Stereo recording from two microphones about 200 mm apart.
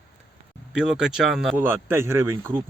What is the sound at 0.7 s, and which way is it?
Speech, 5° right (ahead or behind).